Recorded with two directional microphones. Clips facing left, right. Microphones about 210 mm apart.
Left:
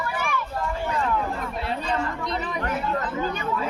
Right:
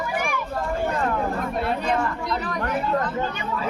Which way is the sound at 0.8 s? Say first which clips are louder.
Right 1 dB; 45° right (ahead or behind).